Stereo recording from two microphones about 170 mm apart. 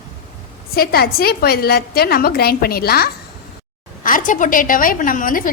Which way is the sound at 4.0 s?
50° left (ahead or behind).